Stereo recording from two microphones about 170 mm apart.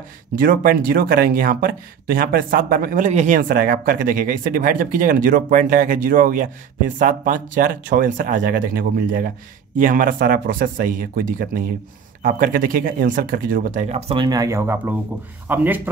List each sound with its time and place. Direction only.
0.4 s speech: 55° right (ahead or behind); by 14.2 s 35° right (ahead or behind)
14.2 s speech: 20° right (ahead or behind)